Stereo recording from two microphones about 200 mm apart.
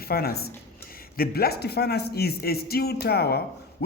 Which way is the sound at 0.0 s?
50° left (ahead or behind).